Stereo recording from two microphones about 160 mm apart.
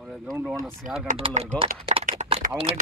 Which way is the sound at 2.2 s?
45° right (ahead or behind).